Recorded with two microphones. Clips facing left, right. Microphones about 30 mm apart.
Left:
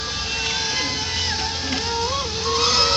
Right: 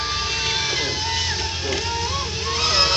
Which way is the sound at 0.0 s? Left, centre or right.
Centre.